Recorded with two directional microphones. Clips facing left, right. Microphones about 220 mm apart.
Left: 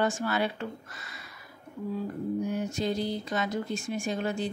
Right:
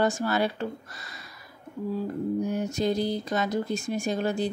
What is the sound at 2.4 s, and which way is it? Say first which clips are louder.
A woman's voice: right 3 dB; 40° right (ahead or behind).